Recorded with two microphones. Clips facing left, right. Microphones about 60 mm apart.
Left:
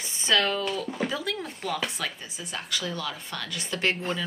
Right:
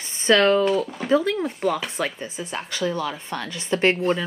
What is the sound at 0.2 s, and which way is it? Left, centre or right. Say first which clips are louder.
Speech: right 8 dB; right.